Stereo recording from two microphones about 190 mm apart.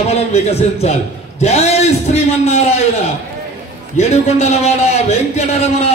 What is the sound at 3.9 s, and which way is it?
Speech, 35° left (ahead or behind).